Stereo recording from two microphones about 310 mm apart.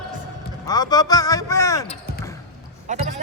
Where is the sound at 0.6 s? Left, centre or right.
Centre.